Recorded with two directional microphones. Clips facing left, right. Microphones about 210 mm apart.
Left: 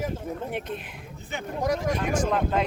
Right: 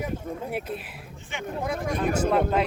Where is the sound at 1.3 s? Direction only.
40° left (ahead or behind).